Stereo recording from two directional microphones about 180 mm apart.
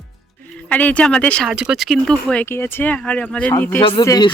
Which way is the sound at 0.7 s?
10° left (ahead or behind).